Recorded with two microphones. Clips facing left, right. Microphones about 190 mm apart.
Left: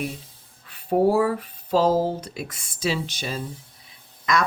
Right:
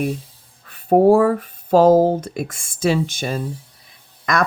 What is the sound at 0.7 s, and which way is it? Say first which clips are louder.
Speech: right 7 dB; 50° right (ahead or behind).